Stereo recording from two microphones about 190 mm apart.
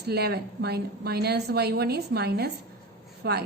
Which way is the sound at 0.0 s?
60° right (ahead or behind).